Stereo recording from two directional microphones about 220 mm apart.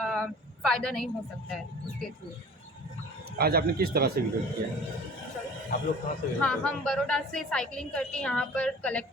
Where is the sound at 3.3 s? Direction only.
45° right (ahead or behind).